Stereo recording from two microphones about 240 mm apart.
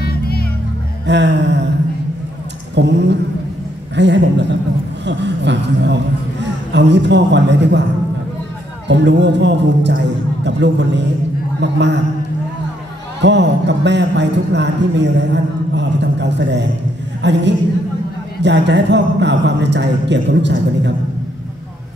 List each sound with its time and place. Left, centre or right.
0.0 s music: left
1.0 s a man's voice: right
2.7 s a man's voice: right
8.8 s a man's voice: right
13.2 s a man's voice: right